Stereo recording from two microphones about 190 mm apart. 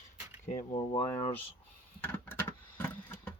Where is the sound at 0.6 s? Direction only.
25° left (ahead or behind).